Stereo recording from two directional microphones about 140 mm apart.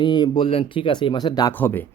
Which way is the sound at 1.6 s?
15° left (ahead or behind).